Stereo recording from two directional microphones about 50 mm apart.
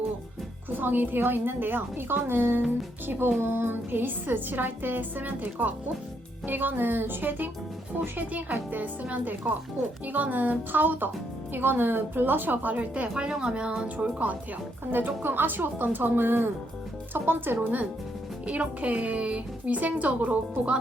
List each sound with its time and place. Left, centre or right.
0.8 s a woman's voice: right
12.9 s a woman's voice: right
14.8 s speech: right
18.4 s a woman's voice: right